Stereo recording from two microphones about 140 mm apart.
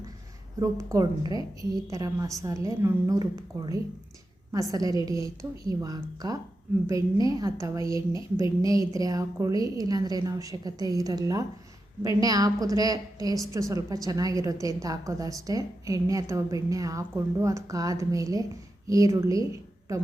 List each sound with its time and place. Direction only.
0.6 s a woman's voice: 20° right (ahead or behind)